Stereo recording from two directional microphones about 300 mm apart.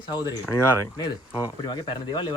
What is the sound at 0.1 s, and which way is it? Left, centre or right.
Speech, centre.